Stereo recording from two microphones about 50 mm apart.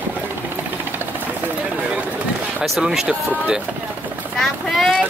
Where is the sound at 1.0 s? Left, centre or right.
Right.